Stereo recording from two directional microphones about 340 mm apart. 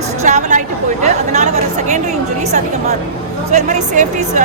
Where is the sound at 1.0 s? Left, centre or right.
Centre.